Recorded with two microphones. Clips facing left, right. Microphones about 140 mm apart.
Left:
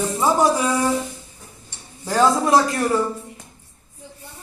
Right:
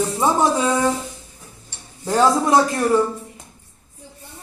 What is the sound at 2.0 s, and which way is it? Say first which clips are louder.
Speech: right 1 dB; 20° right (ahead or behind).